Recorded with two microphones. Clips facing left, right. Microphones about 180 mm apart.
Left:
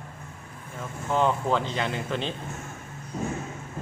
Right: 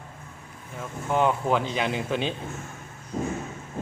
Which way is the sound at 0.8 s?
10° right (ahead or behind).